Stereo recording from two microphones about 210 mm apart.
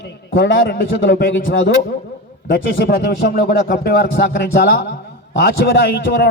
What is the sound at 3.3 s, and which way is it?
A man's voice, 45° left (ahead or behind).